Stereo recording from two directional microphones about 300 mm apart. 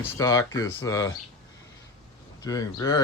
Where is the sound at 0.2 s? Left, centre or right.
Centre.